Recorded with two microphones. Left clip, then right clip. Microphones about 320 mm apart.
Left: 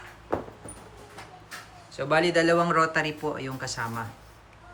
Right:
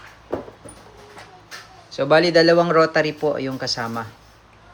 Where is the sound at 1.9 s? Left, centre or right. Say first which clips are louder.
Right 8 dB; centre.